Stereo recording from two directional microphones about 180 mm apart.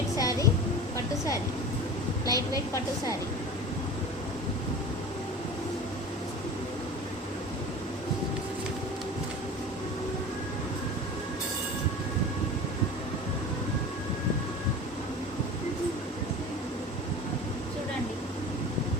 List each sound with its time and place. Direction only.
0.2 s music: 20° left (ahead or behind)
2.2 s a woman's voice: 20° left (ahead or behind)